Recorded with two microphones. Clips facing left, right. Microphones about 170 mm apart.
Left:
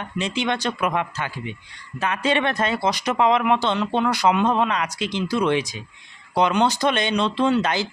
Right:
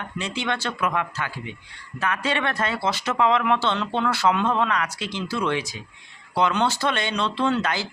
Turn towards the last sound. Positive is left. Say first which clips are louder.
# left 3 dB
turn(degrees=20)  # may be behind; listen again after turning